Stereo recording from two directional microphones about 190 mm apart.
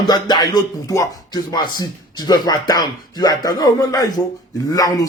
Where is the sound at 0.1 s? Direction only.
20° left (ahead or behind).